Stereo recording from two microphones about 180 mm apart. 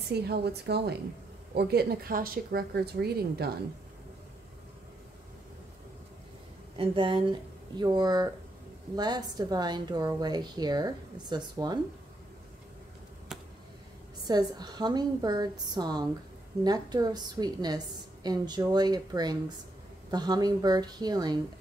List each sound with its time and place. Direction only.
0.1 s speech: 65° right (ahead or behind)
6.8 s a woman's voice: 30° right (ahead or behind)
13.3 s a sound: centre (ahead or behind)
14.2 s a woman's voice: 20° right (ahead or behind)